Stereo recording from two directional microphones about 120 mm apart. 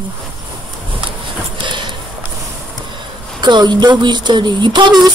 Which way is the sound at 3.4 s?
40° right (ahead or behind).